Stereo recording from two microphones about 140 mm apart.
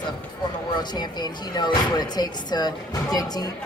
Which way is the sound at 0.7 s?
30° left (ahead or behind).